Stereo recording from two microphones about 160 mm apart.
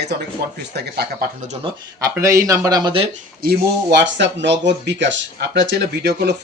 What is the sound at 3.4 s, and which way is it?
Speech, 85° right.